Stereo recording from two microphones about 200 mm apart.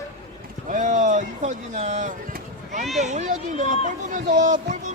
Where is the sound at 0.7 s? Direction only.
40° right (ahead or behind).